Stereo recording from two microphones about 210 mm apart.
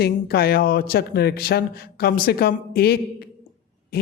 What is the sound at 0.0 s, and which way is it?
Speech, 50° left (ahead or behind).